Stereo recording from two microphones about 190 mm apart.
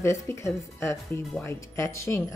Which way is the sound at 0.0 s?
15° left (ahead or behind).